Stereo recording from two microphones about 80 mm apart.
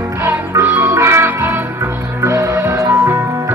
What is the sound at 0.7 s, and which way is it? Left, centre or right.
Music, right.